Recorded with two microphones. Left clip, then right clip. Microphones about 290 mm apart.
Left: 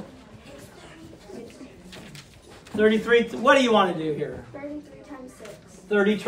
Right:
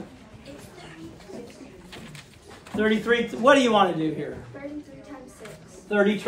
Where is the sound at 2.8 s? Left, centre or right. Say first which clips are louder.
Left 3 dB; centre.